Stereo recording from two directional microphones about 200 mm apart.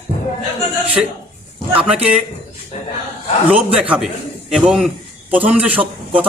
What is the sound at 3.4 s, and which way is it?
A man's voice, 5° right (ahead or behind).